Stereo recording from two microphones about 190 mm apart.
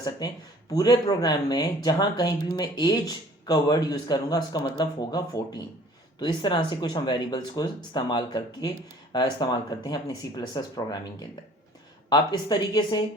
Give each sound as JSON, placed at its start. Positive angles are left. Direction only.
{"t": 0.7, "sound": "speech", "side_deg": 20}
{"t": 12.0, "sound": "speech", "side_deg": 20}